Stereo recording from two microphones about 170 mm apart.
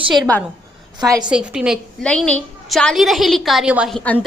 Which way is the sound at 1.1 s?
25° right (ahead or behind).